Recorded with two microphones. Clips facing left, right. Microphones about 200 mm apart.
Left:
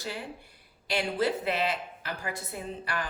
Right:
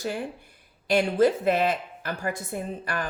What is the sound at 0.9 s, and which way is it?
A woman's voice, 45° right (ahead or behind).